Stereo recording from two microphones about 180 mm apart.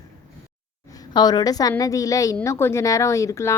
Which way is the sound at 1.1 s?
25° left (ahead or behind).